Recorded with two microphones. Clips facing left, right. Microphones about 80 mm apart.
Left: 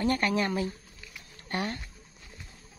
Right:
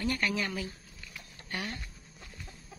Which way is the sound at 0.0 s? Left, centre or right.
Left.